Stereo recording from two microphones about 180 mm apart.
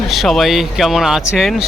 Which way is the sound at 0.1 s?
Centre (ahead or behind).